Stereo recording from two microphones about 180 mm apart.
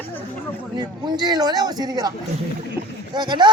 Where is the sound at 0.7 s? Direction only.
20° right (ahead or behind).